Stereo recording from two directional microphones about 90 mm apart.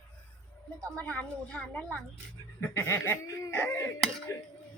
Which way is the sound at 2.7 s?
25° left (ahead or behind).